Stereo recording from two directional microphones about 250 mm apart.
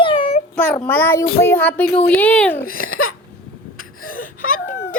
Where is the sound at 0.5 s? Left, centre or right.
Centre.